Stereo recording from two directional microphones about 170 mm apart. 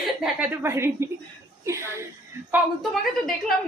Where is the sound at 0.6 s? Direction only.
15° right (ahead or behind).